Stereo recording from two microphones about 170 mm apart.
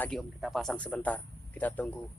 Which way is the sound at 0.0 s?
Centre (ahead or behind).